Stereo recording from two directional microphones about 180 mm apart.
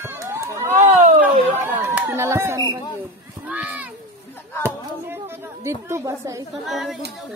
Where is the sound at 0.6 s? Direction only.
40° right (ahead or behind).